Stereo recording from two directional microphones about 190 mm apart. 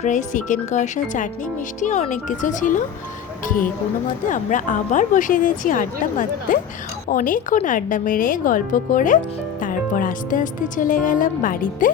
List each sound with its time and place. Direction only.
0.0 s a woman's voice: 40° left (ahead or behind)